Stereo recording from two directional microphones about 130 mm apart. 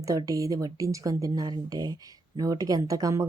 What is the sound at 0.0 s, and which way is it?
A woman's voice, 25° right (ahead or behind).